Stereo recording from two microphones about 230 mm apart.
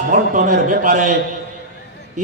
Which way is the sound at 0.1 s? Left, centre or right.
Right.